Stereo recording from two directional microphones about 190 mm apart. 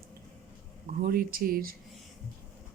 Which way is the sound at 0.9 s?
50° right (ahead or behind).